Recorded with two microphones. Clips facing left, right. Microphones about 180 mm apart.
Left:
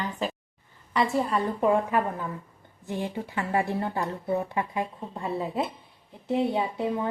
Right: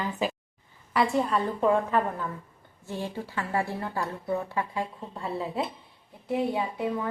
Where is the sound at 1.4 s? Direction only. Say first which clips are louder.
Left 2 dB; 15° left (ahead or behind).